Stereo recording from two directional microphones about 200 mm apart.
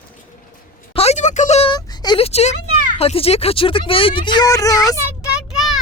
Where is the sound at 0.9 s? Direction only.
35° left (ahead or behind).